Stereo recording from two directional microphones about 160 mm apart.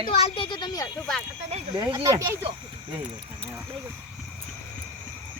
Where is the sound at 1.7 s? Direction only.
20° right (ahead or behind).